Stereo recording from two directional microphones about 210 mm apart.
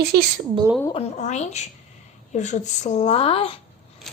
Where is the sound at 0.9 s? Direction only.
30° left (ahead or behind).